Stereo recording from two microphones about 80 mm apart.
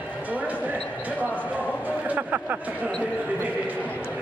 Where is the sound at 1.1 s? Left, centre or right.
Left.